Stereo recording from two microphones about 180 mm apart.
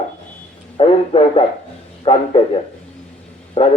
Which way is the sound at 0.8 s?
30° left (ahead or behind).